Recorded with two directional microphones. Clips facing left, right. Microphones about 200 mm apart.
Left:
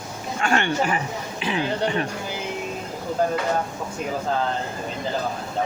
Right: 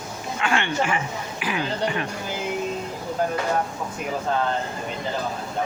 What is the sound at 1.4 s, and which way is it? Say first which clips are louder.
Speech: left 2 dB; 30° left (ahead or behind).